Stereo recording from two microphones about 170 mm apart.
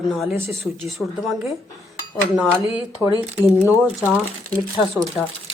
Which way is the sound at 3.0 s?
15° left (ahead or behind).